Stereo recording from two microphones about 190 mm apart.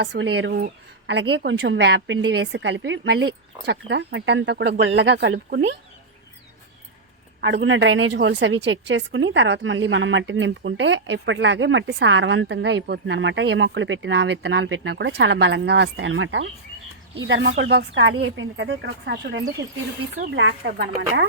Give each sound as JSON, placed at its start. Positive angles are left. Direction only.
{"t": 0.0, "sound": "a woman's voice", "side_deg": -65}
{"t": 7.4, "sound": "a woman's voice", "side_deg": -70}
{"t": 17.2, "sound": "a woman's voice", "side_deg": -70}
{"t": 20.3, "sound": "a woman's voice", "side_deg": -75}